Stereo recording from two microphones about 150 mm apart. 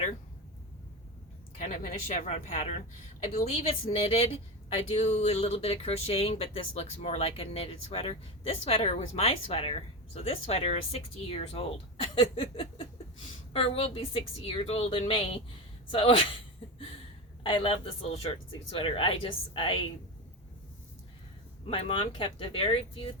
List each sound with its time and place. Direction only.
1.5 s speech: 60° left (ahead or behind)
2.0 s speech: 45° left (ahead or behind)
17.4 s speech: 35° left (ahead or behind)
21.7 s speech: 40° left (ahead or behind)